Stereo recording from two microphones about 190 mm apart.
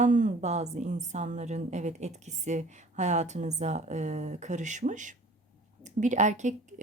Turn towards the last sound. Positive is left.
turn(degrees=-40)  # may be behind; listen again after turning